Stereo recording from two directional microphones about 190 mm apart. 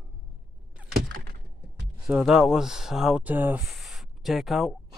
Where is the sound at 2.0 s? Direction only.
5° right (ahead or behind).